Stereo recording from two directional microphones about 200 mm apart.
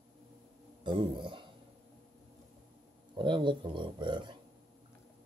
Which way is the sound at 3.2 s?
25° right (ahead or behind).